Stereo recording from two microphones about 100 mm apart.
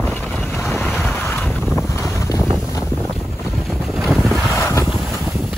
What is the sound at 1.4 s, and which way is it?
Boat, 5° left (ahead or behind).